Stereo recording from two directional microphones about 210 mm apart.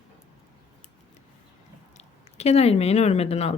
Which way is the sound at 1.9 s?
30° left (ahead or behind).